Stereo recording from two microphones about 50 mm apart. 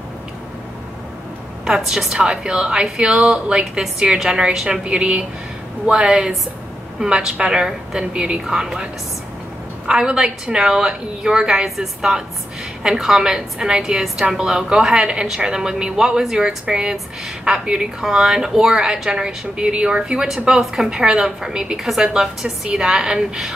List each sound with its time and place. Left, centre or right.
1.6 s a woman's voice: centre
9.8 s a woman's voice: centre